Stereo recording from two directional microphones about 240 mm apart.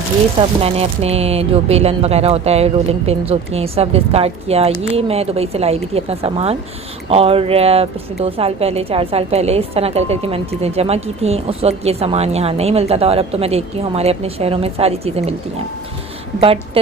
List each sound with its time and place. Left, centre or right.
0.6 s speech: right